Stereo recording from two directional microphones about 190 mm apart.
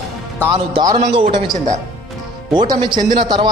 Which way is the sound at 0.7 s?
25° right (ahead or behind).